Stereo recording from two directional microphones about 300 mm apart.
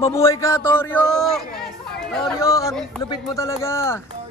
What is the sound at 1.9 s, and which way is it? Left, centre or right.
Speech, centre.